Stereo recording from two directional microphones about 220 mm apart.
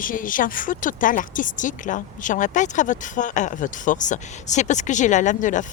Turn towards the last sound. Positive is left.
turn(degrees=35)  # may be behind; listen again after turning